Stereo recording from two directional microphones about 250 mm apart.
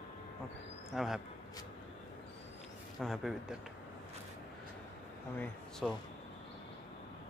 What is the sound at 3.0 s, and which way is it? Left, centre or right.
Speech, centre.